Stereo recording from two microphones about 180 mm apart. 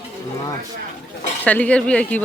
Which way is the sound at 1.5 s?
5° left (ahead or behind).